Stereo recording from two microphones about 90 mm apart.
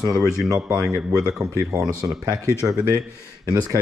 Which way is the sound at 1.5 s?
40° right (ahead or behind).